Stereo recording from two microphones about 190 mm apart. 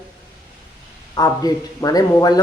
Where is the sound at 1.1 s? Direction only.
20° left (ahead or behind).